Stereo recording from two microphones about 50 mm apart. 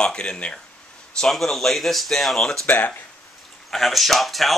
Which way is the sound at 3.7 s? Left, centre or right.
Centre.